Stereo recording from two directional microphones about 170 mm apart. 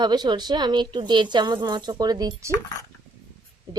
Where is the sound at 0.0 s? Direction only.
25° right (ahead or behind).